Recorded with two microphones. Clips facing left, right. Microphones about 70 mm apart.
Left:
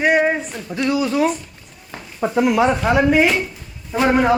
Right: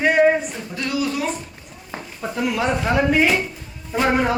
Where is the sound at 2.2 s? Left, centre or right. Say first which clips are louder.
Left 6 dB; left.